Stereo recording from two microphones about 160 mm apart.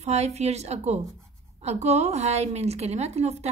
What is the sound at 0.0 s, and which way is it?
A woman's voice, 40° right (ahead or behind).